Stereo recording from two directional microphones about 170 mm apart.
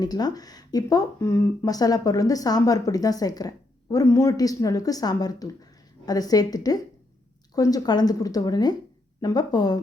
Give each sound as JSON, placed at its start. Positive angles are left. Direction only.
{"t": 0.0, "sound": "speech", "side_deg": 25}